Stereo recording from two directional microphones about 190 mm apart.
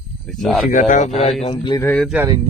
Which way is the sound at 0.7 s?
40° left (ahead or behind).